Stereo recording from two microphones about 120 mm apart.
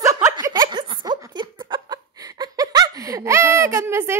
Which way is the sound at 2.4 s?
35° right (ahead or behind).